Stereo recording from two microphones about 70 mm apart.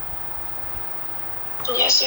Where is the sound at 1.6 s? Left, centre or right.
Left.